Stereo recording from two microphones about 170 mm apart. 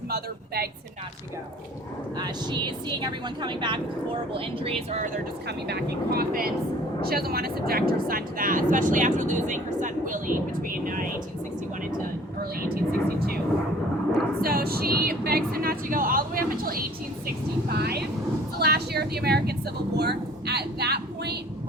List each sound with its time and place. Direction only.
0.1 s speech: 65° right (ahead or behind)
2.1 s speech: 25° right (ahead or behind); by 5.2 s 50° right (ahead or behind)
5.5 s speech: 75° right (ahead or behind); by 11.1 s 55° right (ahead or behind)
12.4 s speech: 60° right (ahead or behind)
14.4 s speech: 65° right (ahead or behind)
17.7 s a woman's voice: 70° right (ahead or behind)